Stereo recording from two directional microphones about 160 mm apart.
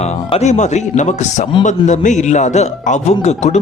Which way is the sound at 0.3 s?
45° left (ahead or behind).